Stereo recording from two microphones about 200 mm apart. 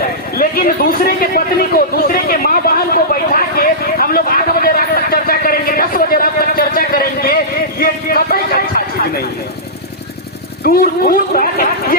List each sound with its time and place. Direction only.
0.3 s a man's voice: 45° left (ahead or behind)
2.2 s vehicle: 45° left (ahead or behind)
10.6 s speech: 45° left (ahead or behind)